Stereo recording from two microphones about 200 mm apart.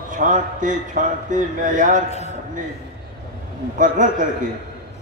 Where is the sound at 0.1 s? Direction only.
40° right (ahead or behind).